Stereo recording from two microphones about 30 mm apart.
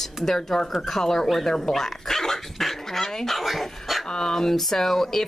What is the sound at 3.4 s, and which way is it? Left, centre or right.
Speech, centre.